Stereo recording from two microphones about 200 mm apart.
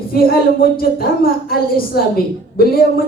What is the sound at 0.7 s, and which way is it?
A woman's voice, 50° left (ahead or behind).